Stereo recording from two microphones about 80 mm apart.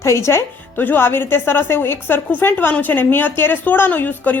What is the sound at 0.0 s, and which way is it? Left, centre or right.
Speech, left.